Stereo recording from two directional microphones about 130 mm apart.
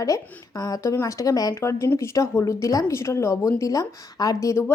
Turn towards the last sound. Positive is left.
turn(degrees=25)  # may be behind; listen again after turning